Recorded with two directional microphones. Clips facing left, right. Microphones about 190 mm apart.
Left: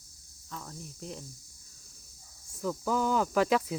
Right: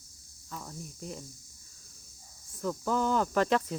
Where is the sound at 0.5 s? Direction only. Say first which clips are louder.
Right 1 dB; 5° right (ahead or behind).